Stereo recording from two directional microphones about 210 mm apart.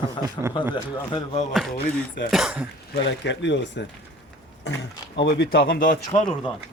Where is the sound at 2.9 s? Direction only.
60° left (ahead or behind).